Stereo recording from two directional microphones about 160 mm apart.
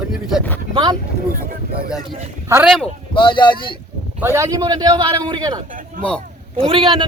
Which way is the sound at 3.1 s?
30° left (ahead or behind).